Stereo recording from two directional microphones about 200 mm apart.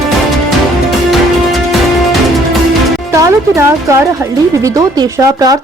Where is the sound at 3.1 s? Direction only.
15° right (ahead or behind).